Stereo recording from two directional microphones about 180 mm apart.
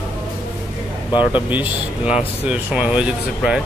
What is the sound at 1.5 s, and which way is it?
Speech, 5° right (ahead or behind).